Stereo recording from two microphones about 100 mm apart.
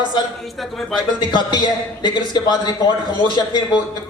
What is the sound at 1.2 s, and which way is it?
Speech, 50° left (ahead or behind).